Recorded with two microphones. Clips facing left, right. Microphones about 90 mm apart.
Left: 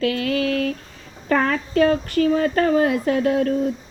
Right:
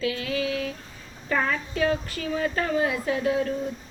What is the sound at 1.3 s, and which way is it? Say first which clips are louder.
Speech: left 6 dB; 55° left (ahead or behind).